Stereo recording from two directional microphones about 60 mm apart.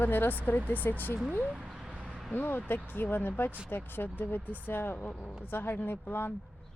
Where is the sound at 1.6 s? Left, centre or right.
Centre.